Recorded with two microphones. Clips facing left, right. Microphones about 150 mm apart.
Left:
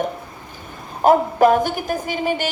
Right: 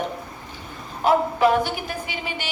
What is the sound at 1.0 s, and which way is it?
A woman's voice, 45° left (ahead or behind).